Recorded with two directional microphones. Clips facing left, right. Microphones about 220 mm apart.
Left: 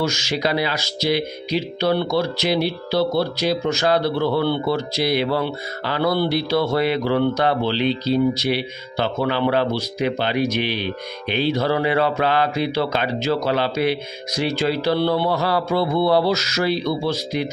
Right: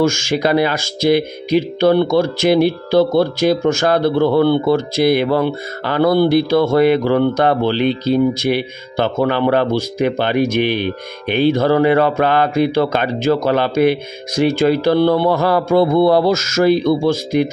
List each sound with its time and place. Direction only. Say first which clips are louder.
0.0 s speech: right 7 dB; 50° right (ahead or behind)